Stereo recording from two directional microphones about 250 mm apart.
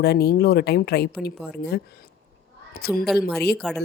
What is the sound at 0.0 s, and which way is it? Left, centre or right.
A woman's voice, left.